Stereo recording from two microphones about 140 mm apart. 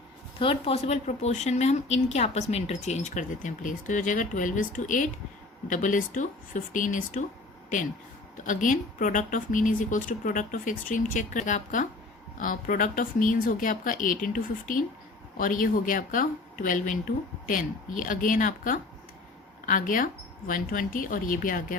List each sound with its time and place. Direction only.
0.3 s speech: 40° left (ahead or behind); by 7.3 s 65° left (ahead or behind)
8.4 s speech: 70° left (ahead or behind)
12.4 s a woman's voice: 75° left (ahead or behind)